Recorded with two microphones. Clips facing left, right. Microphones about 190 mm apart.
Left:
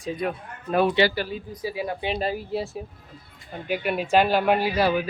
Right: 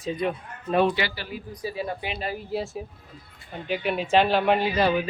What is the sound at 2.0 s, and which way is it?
Speech, 35° left (ahead or behind).